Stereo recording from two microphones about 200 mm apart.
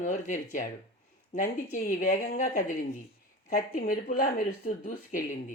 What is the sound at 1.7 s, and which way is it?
Speech, 40° left (ahead or behind).